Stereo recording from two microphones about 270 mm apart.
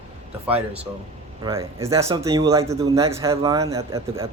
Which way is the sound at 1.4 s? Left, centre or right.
Centre.